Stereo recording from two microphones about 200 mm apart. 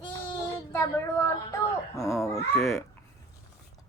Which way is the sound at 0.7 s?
15° left (ahead or behind).